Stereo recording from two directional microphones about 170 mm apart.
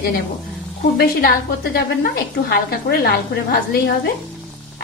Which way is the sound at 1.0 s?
65° left (ahead or behind).